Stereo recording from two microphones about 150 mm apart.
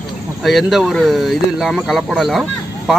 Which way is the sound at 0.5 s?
Centre (ahead or behind).